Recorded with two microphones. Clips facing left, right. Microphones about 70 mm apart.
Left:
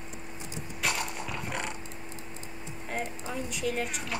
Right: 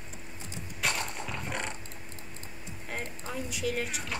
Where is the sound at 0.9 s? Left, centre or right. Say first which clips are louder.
Left 2 dB; centre.